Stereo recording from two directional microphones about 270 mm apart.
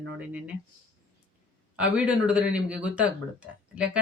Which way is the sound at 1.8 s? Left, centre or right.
Centre.